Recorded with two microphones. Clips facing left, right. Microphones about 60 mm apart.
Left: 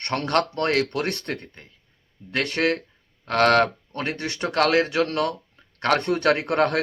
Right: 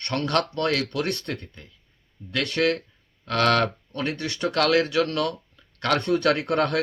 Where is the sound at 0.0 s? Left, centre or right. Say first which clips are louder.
Left 2 dB; left.